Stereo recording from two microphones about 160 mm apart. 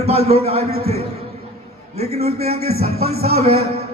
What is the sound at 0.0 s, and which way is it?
Speech, 40° right (ahead or behind).